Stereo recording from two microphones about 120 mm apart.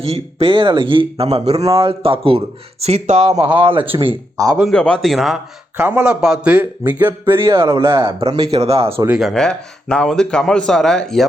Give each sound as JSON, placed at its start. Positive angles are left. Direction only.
{"t": 0.0, "sound": "a man's voice", "side_deg": -55}
{"t": 2.8, "sound": "speech", "side_deg": -65}
{"t": 3.4, "sound": "a man's voice", "side_deg": -45}
{"t": 4.6, "sound": "speech", "side_deg": 5}
{"t": 5.7, "sound": "speech", "side_deg": -15}
{"t": 8.4, "sound": "speech", "side_deg": -60}
{"t": 9.0, "sound": "speech", "side_deg": -5}
{"t": 9.3, "sound": "speech", "side_deg": 5}